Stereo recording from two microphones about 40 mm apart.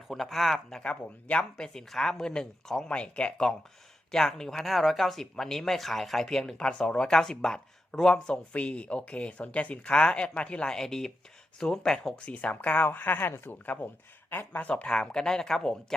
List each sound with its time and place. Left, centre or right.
0.1 s speech: centre
0.8 s speech: left
4.1 s speech: centre
6.7 s speech: left
8.5 s speech: left
10.7 s speech: centre
12.1 s speech: left
13.7 s speech: left; by 16.0 s centre